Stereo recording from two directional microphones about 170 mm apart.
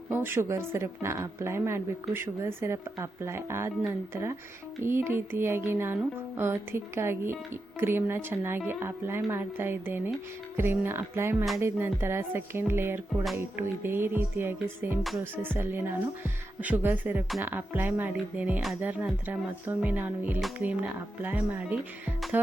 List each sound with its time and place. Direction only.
0.1 s speech: 15° right (ahead or behind)